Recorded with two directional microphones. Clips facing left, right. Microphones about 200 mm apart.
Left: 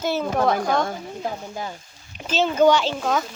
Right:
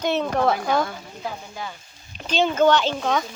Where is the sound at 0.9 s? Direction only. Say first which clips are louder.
Left 4 dB; 40° left (ahead or behind).